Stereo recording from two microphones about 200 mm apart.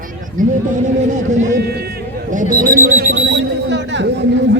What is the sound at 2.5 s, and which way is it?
Speech, 45° right (ahead or behind).